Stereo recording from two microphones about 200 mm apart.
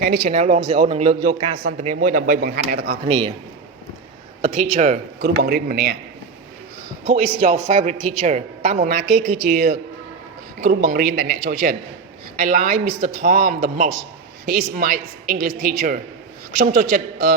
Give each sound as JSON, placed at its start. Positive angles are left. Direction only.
{"t": 0.3, "sound": "a man's voice", "side_deg": -35}
{"t": 2.7, "sound": "speech", "side_deg": -55}
{"t": 3.1, "sound": "a man's voice", "side_deg": -35}
{"t": 4.4, "sound": "a man's voice", "side_deg": -40}
{"t": 5.4, "sound": "speech", "side_deg": -50}
{"t": 7.0, "sound": "a man's voice", "side_deg": -35}